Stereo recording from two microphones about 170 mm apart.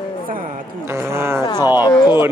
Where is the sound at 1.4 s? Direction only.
25° left (ahead or behind).